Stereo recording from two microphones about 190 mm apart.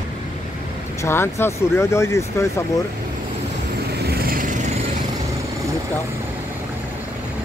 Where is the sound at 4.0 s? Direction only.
55° right (ahead or behind).